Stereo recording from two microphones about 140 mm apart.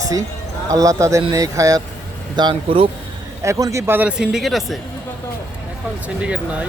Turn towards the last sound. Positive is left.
turn(degrees=-10)  # may be behind; listen again after turning